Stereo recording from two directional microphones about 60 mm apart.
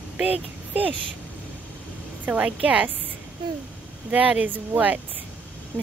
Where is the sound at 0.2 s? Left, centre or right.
Right.